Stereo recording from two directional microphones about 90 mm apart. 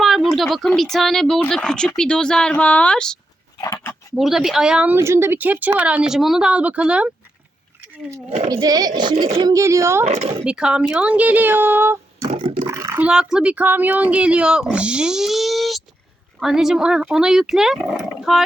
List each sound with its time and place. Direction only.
0.0 s a sound: centre (ahead or behind)
0.8 s speech: 5° left (ahead or behind)
4.1 s speech: 5° right (ahead or behind)
4.9 s speech: 30° right (ahead or behind); by 7.1 s 15° right (ahead or behind)
8.6 s speech: 45° right (ahead or behind)
9.4 s a woman's voice: 40° right (ahead or behind)
10.4 s speech: 10° right (ahead or behind)
12.4 s a sound: 65° right (ahead or behind)
12.6 s a sound: 35° right (ahead or behind)
13.0 s speech: 10° right (ahead or behind)